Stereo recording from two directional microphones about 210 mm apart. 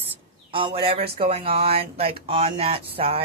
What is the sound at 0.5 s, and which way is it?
Speech, 25° right (ahead or behind).